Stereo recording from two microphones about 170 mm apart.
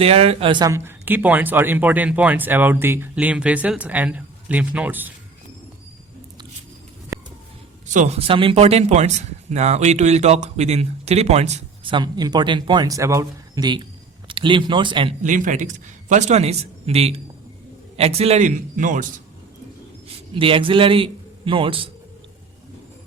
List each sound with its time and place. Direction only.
0.0 s speech: 35° right (ahead or behind); by 5.1 s 10° right (ahead or behind)
8.3 s speech: 30° right (ahead or behind)
15.2 s a man's voice: 50° right (ahead or behind)
20.3 s a man's voice: 30° right (ahead or behind)